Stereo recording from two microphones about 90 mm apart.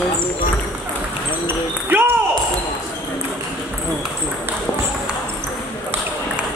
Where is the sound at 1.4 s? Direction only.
25° right (ahead or behind).